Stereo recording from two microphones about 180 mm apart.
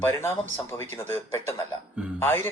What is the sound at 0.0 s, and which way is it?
Speech, 15° left (ahead or behind).